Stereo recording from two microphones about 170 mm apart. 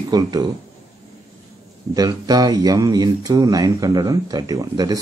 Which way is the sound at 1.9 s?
20° right (ahead or behind).